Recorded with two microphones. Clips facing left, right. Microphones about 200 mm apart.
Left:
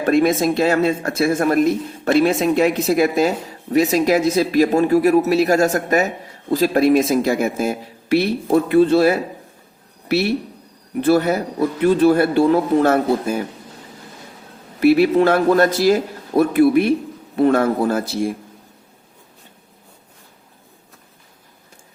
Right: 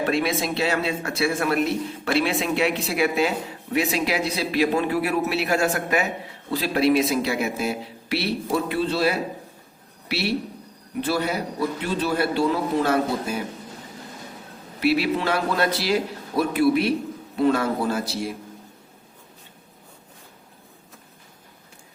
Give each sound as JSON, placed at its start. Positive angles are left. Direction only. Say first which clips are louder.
{"t": 0.0, "sound": "speech", "louder": "left 8 dB", "side_deg": 45}
{"t": 14.8, "sound": "speech", "louder": "left 9 dB", "side_deg": 50}